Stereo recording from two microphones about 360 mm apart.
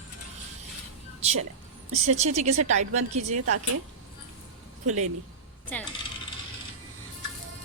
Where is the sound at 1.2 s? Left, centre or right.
Centre.